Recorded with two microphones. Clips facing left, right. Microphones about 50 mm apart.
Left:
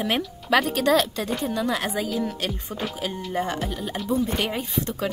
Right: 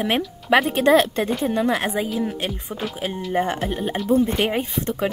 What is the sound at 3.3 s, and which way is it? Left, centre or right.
Speech, right.